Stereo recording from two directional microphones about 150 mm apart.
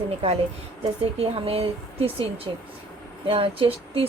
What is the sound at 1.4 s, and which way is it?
Speech, 40° right (ahead or behind).